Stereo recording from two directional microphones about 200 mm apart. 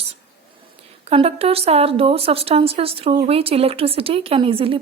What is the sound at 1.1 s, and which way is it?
Speech, 30° right (ahead or behind).